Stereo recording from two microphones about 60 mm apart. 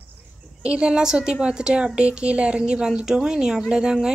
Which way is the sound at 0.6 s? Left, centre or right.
Centre.